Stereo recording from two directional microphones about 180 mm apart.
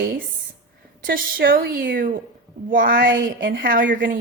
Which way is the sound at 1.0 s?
55° right (ahead or behind).